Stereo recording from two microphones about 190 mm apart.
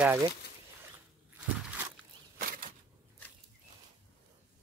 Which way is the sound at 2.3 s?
45° right (ahead or behind).